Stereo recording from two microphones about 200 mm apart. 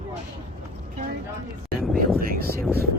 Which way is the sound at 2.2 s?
50° right (ahead or behind).